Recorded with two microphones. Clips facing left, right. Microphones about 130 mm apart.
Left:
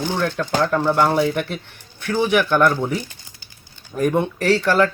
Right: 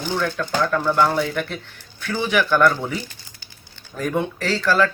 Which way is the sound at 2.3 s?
15° left (ahead or behind).